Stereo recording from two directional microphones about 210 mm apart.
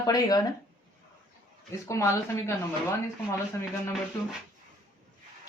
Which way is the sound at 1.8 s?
15° left (ahead or behind).